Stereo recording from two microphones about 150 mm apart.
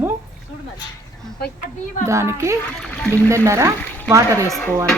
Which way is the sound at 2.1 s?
20° right (ahead or behind).